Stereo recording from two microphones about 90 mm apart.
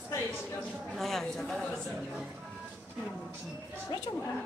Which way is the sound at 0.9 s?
5° left (ahead or behind).